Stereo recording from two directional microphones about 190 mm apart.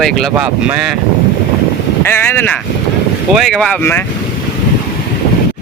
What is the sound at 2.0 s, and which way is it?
Speech, 10° left (ahead or behind).